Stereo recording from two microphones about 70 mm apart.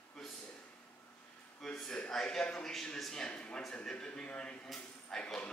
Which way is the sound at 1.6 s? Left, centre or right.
Centre.